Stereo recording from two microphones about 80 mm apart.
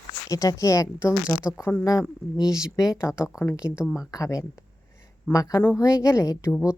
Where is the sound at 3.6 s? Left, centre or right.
Centre.